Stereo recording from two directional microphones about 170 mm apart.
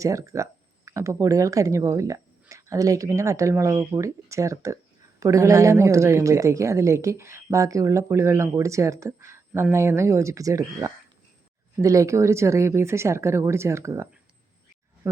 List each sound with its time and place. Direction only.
0.0 s speech: 20° right (ahead or behind)